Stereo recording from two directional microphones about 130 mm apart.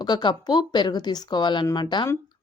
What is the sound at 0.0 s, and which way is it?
A woman's voice, 35° left (ahead or behind).